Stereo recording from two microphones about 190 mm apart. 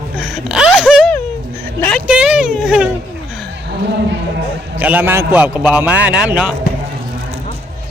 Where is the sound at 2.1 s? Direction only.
5° right (ahead or behind).